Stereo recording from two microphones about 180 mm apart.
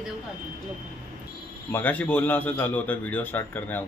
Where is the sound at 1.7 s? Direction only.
10° left (ahead or behind).